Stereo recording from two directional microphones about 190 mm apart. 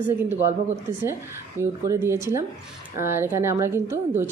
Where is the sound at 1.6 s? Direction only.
15° right (ahead or behind).